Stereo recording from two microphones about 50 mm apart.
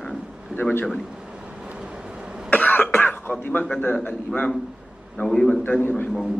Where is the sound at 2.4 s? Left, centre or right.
Left.